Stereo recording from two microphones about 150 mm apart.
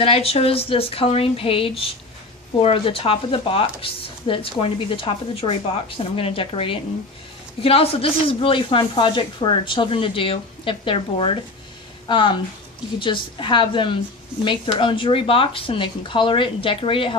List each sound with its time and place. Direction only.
0.0 s speech: 40° left (ahead or behind)